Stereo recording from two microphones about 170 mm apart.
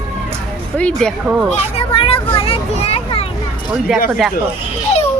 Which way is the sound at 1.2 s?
10° right (ahead or behind).